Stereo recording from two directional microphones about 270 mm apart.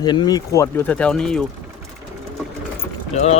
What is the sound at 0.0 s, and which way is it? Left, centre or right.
Speech, centre.